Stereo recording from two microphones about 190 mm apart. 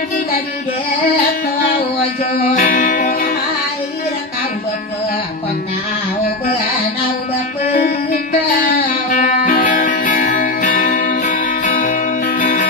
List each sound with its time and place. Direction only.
2.5 s music: 45° left (ahead or behind)
7.7 s music: 45° left (ahead or behind)